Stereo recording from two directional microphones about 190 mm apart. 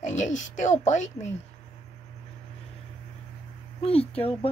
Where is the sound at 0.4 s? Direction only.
40° left (ahead or behind).